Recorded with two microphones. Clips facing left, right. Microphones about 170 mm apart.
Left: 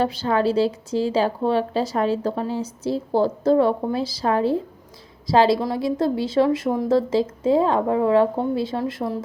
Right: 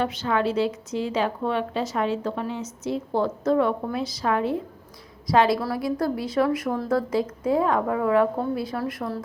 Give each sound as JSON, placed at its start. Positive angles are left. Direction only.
{"t": 0.0, "sound": "a woman's voice", "side_deg": 35}